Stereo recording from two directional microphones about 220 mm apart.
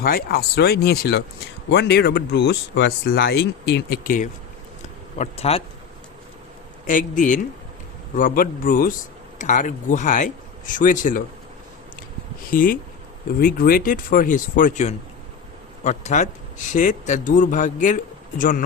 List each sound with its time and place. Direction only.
0.0 s speech: 45° left (ahead or behind)
5.1 s speech: 30° left (ahead or behind)
6.8 s speech: 35° left (ahead or behind)
12.5 s speech: 40° left (ahead or behind)